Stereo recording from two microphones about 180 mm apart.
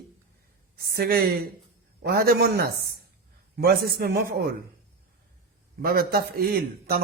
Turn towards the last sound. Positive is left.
turn(degrees=-60)  # may be behind; listen again after turning